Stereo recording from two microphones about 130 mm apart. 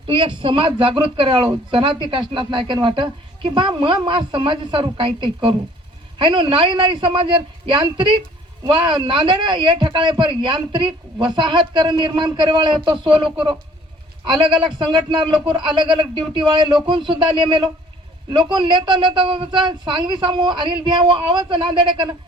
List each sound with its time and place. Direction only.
0.1 s speech: 40° right (ahead or behind)
14.6 s speech: 40° right (ahead or behind)